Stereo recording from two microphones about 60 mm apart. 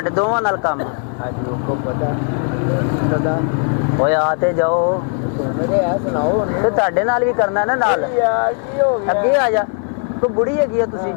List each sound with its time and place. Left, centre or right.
0.0 s speech: centre
3.1 s speech: centre